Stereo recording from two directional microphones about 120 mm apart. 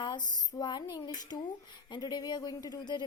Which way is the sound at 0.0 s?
35° left (ahead or behind).